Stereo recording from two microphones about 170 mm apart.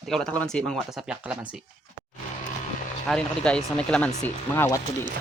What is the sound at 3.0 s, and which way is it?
Speech, 5° left (ahead or behind).